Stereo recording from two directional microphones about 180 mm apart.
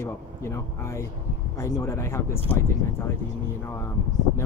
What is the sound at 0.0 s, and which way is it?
Speech, 15° left (ahead or behind).